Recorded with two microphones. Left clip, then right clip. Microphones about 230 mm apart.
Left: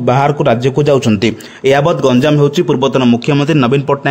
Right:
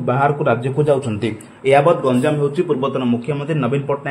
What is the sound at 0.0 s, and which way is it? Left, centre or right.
A man's voice, left.